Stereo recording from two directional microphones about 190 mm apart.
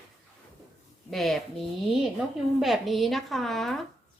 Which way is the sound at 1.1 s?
Centre (ahead or behind).